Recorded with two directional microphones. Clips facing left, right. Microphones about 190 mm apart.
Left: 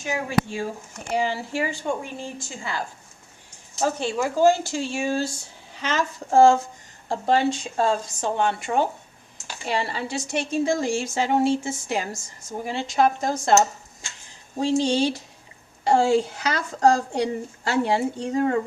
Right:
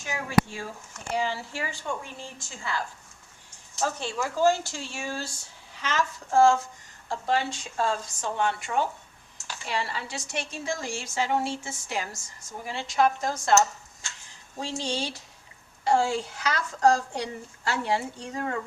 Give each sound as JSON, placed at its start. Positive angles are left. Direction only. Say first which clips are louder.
{"t": 0.0, "sound": "a woman's voice", "louder": "left 1 dB", "side_deg": 20}
{"t": 14.6, "sound": "speech", "louder": "left 10 dB", "side_deg": 20}